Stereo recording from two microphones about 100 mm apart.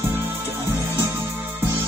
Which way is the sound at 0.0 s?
25° right (ahead or behind).